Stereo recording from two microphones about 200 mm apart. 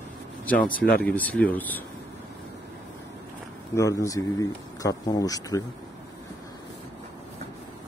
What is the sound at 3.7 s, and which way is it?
Speech, 15° left (ahead or behind).